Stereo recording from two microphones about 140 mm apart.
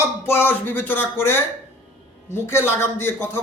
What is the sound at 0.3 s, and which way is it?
A man's voice, 15° left (ahead or behind).